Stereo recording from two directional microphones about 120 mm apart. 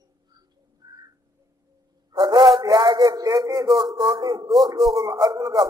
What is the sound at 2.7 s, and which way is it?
A man's voice, 35° right (ahead or behind).